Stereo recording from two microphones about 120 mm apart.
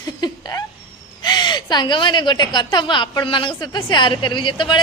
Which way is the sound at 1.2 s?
35° left (ahead or behind).